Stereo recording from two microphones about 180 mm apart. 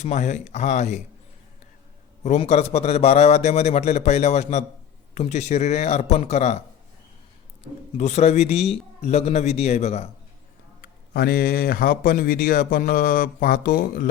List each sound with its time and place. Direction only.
0.0 s a man's voice: 40° left (ahead or behind)
2.4 s a man's voice: 35° left (ahead or behind)
7.9 s a man's voice: 40° left (ahead or behind)
10.8 s speech: 60° left (ahead or behind)